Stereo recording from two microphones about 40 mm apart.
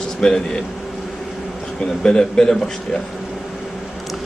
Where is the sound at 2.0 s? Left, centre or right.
Centre.